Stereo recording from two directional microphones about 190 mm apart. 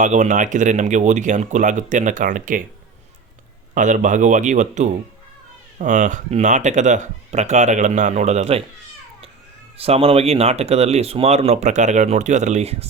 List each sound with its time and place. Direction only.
0.0 s speech: 40° right (ahead or behind)
3.8 s speech: 40° right (ahead or behind)
9.7 s speech: 30° right (ahead or behind)